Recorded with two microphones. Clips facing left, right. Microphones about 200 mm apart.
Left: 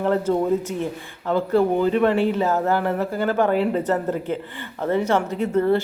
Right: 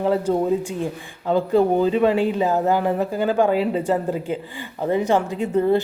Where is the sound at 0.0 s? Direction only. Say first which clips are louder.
Right 1 dB; 10° right (ahead or behind).